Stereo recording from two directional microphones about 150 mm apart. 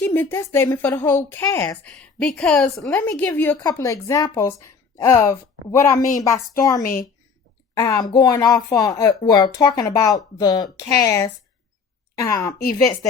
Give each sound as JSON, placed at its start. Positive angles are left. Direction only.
{"t": 0.0, "sound": "a woman's voice", "side_deg": 10}
{"t": 2.9, "sound": "a woman's voice", "side_deg": 15}
{"t": 6.8, "sound": "speech", "side_deg": 70}
{"t": 7.8, "sound": "a woman's voice", "side_deg": 25}